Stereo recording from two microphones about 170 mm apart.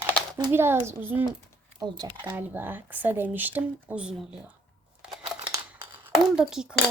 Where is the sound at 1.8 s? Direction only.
25° right (ahead or behind).